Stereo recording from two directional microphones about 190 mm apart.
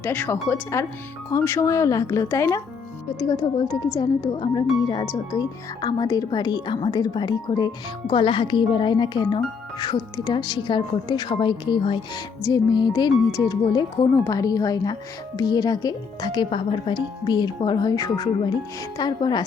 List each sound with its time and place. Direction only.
0.0 s speech: 10° left (ahead or behind)